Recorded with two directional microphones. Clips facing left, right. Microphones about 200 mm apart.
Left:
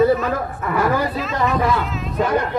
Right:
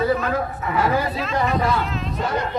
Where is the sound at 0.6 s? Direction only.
50° left (ahead or behind).